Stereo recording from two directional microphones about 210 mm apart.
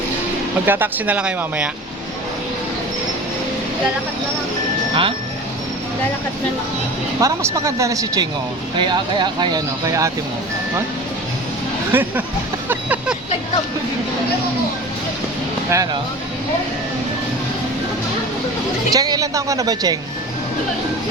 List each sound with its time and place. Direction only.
0.6 s a woman's voice: 10° right (ahead or behind)
7.2 s a woman's voice: 15° right (ahead or behind)
11.9 s speech: 10° right (ahead or behind)
12.6 s vehicle: 5° right (ahead or behind)
15.7 s a woman's voice: 15° right (ahead or behind)
18.9 s a woman's voice: 15° right (ahead or behind)